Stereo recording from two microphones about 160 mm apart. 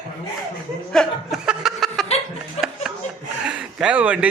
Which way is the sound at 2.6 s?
40° left (ahead or behind).